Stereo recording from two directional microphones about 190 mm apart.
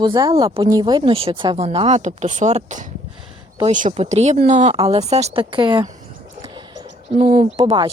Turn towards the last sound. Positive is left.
turn(degrees=-25)  # may be behind; listen again after turning